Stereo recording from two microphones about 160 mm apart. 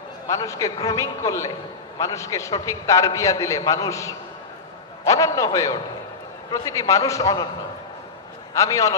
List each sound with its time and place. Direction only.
0.3 s a man's voice: 20° left (ahead or behind)
8.5 s a man's voice: 20° left (ahead or behind)